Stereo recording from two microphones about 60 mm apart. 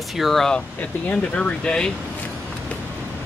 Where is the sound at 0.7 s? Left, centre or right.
Left.